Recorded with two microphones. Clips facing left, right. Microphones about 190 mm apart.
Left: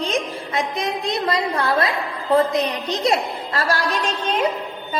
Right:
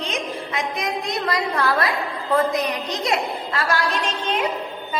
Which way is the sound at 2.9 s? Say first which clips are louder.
Left 3 dB; 35° left (ahead or behind).